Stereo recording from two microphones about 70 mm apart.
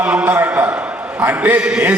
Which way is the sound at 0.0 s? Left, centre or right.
Right.